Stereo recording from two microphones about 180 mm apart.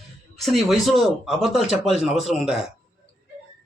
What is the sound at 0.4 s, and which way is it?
A man's voice, centre (ahead or behind).